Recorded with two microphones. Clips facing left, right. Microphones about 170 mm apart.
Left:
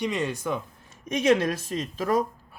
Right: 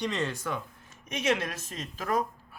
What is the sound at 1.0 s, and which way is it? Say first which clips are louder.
A woman's voice: left 7 dB; 35° left (ahead or behind).